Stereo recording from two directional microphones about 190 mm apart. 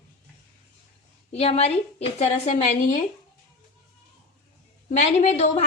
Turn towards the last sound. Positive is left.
turn(degrees=35)  # may be behind; listen again after turning